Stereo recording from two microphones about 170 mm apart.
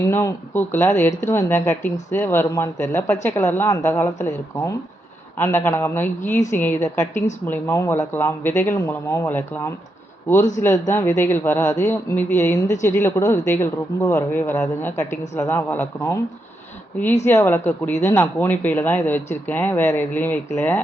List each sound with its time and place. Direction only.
0.0 s speech: 15° left (ahead or behind)
17.2 s speech: 15° left (ahead or behind)